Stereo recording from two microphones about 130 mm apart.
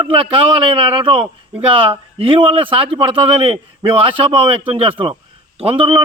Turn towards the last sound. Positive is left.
turn(degrees=-45)  # may be behind; listen again after turning